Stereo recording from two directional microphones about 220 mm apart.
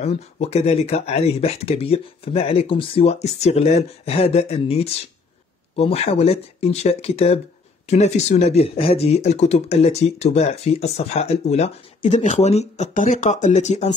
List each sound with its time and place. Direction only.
0.0 s speech: 30° left (ahead or behind)